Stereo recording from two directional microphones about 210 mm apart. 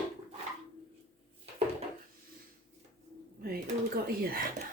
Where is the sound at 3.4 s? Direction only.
40° right (ahead or behind).